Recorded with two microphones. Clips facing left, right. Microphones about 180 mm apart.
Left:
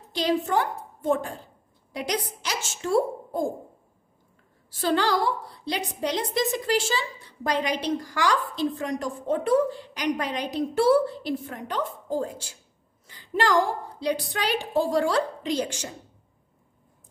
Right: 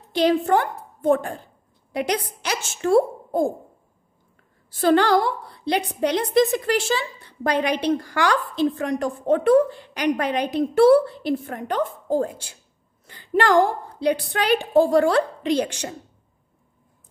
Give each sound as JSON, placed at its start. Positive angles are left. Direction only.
{"t": 0.1, "sound": "a woman's voice", "side_deg": -60}
{"t": 4.7, "sound": "a woman's voice", "side_deg": -55}